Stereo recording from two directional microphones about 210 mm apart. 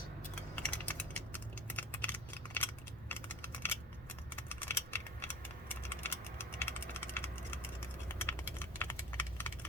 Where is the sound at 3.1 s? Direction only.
10° left (ahead or behind).